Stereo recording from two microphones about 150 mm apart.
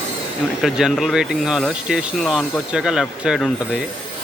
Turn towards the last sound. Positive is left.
turn(degrees=0)  # may be behind; listen again after turning